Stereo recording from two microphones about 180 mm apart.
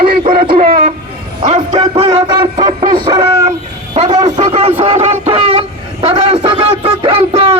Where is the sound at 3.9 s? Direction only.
35° right (ahead or behind).